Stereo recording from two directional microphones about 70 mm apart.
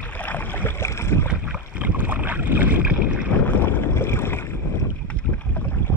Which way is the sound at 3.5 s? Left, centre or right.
Left.